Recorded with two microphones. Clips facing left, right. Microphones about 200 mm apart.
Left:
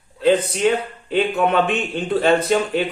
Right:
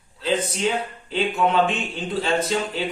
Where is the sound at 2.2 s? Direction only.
60° left (ahead or behind).